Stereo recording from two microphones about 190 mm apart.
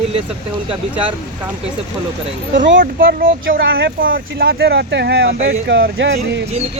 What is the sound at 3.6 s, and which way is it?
Speech, 85° right.